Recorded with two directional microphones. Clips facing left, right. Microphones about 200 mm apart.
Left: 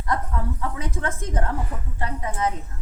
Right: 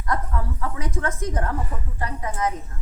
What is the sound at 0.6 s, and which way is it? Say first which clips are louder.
A woman's voice: right 1 dB; 25° left (ahead or behind).